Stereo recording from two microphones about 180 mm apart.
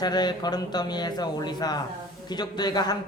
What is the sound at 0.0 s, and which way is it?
Speech, 20° left (ahead or behind).